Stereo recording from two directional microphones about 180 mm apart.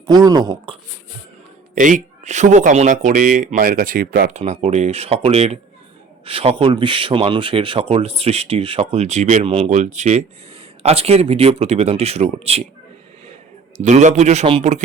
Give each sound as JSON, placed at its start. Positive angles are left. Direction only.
{"t": 0.1, "sound": "speech", "side_deg": -20}
{"t": 1.7, "sound": "speech", "side_deg": -45}
{"t": 4.3, "sound": "speech", "side_deg": -40}
{"t": 13.7, "sound": "speech", "side_deg": -40}